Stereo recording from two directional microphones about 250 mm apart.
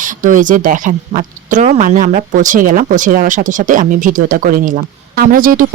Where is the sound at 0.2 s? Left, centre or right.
Right.